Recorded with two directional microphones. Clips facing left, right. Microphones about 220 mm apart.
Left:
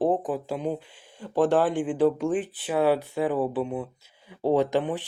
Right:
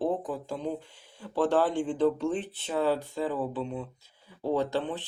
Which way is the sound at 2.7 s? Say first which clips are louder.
Left 5 dB; 75° left (ahead or behind).